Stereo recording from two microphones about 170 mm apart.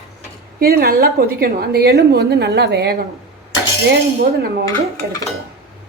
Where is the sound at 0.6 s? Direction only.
65° right (ahead or behind).